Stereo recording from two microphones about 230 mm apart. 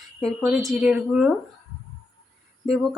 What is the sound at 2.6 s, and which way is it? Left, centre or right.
Speech, centre.